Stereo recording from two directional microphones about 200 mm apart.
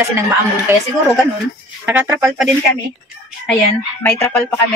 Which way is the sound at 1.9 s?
10° right (ahead or behind).